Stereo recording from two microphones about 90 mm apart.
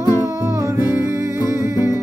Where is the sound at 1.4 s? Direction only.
30° right (ahead or behind).